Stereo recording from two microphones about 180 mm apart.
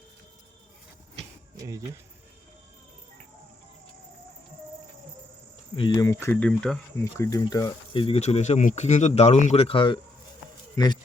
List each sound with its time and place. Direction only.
1.5 s speech: 15° right (ahead or behind)
5.7 s speech: 25° left (ahead or behind); by 6.7 s 5° left (ahead or behind)
7.0 s speech: 15° left (ahead or behind)